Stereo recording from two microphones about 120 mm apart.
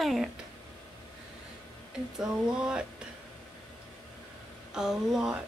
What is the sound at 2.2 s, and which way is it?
Speech, 5° right (ahead or behind).